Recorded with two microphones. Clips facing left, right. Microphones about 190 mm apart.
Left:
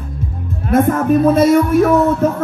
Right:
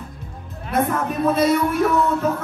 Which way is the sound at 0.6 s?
45° left (ahead or behind).